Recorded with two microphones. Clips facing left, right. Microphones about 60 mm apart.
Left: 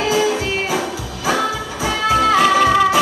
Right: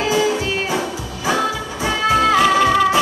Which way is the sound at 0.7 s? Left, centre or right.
Centre.